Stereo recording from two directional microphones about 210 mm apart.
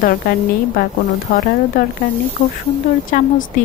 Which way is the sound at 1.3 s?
45° left (ahead or behind).